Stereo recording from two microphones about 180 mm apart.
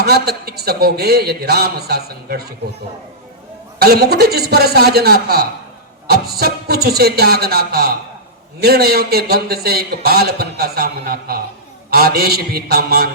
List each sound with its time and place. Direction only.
0.0 s a man's voice: 60° right (ahead or behind)
3.8 s a man's voice: 60° right (ahead or behind)